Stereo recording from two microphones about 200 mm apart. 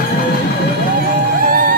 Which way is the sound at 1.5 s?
45° right (ahead or behind).